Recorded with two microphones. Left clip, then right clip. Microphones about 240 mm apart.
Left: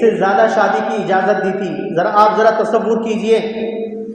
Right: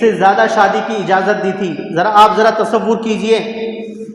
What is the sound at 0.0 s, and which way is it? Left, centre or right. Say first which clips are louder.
A man's voice: right 2 dB; right.